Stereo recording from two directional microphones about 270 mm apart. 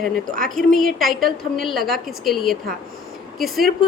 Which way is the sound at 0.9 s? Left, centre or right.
Centre.